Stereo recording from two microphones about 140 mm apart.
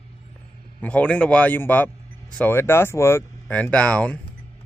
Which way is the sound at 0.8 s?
10° left (ahead or behind).